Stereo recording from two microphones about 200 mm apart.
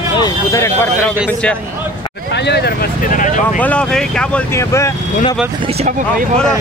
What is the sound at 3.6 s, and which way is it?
Speech, 5° left (ahead or behind).